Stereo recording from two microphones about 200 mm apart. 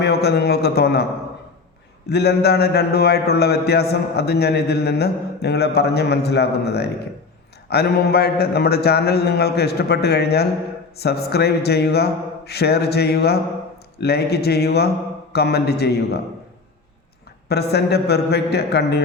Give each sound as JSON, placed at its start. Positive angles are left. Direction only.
{"t": 0.0, "sound": "a man's voice", "side_deg": 55}
{"t": 2.0, "sound": "a man's voice", "side_deg": 55}
{"t": 17.5, "sound": "a man's voice", "side_deg": 55}